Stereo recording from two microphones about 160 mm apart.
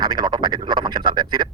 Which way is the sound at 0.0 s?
25° right (ahead or behind).